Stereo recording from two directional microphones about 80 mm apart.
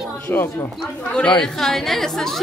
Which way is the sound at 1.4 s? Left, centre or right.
Centre.